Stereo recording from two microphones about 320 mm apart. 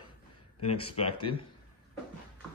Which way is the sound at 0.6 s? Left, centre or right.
Centre.